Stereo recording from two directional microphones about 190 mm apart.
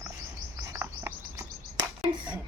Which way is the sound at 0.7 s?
10° right (ahead or behind).